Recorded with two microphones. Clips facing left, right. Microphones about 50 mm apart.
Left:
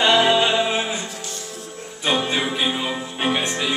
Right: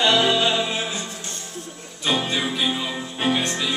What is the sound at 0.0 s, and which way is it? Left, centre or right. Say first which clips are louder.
Music: left 2 dB; centre.